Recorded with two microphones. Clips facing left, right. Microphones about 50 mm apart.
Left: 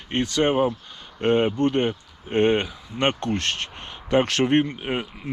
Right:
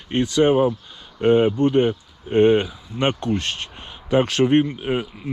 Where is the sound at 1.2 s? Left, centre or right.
Centre.